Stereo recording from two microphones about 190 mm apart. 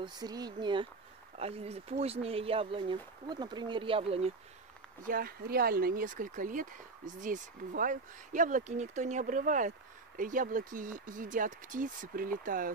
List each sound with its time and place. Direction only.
0.0 s speech: 20° right (ahead or behind)
5.0 s speech: 50° right (ahead or behind)